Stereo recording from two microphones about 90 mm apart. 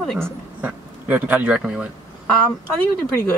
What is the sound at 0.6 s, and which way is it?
Speech, 15° right (ahead or behind).